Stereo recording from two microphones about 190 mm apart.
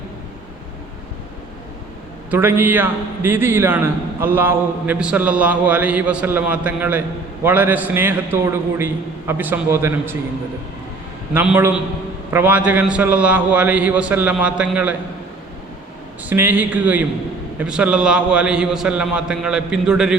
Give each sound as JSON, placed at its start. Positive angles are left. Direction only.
{"t": 2.3, "sound": "a man's voice", "side_deg": -10}
{"t": 11.3, "sound": "a man's voice", "side_deg": -10}
{"t": 16.3, "sound": "a man's voice", "side_deg": -10}